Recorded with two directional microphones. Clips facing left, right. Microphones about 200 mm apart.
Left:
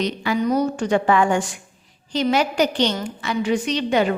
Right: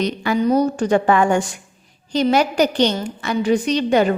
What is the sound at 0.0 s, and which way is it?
A woman's voice, 50° right (ahead or behind).